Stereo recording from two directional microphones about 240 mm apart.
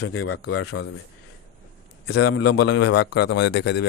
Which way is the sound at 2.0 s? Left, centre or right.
Left.